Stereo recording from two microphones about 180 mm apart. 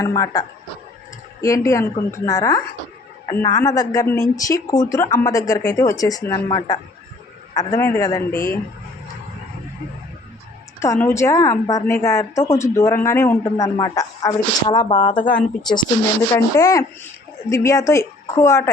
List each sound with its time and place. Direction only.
0.0 s speech: 20° left (ahead or behind)
11.0 s a woman's voice: 15° left (ahead or behind)
15.3 s speech: 5° left (ahead or behind)
16.3 s a woman's voice: 20° left (ahead or behind)